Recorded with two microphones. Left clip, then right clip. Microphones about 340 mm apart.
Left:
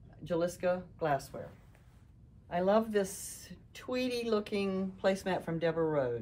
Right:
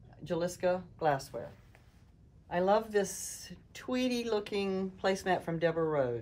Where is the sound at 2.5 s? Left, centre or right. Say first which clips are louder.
Right 1 dB; right.